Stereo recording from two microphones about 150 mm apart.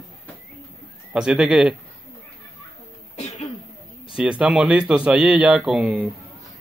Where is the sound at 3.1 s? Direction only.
50° left (ahead or behind).